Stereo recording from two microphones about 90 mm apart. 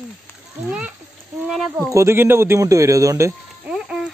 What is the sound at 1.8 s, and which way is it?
Speech, 30° right (ahead or behind).